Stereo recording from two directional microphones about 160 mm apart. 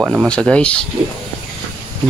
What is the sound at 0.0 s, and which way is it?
Speech, 5° right (ahead or behind).